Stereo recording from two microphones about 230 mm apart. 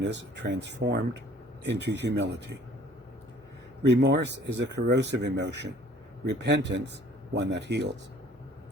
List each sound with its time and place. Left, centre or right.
0.0 s speech: right
3.8 s speech: right